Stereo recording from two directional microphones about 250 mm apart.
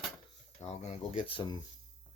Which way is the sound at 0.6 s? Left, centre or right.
Left.